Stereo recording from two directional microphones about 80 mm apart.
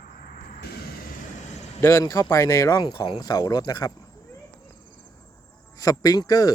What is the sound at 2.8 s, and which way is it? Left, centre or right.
Speech, left.